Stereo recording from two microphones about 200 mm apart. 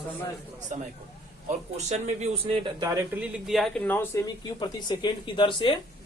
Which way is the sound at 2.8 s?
10° right (ahead or behind).